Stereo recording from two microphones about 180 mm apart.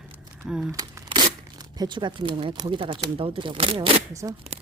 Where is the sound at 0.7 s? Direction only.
25° right (ahead or behind).